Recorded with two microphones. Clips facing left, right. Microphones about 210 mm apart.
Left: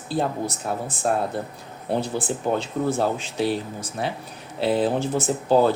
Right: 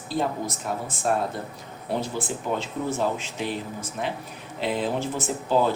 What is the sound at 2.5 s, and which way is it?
Speech, 35° left (ahead or behind).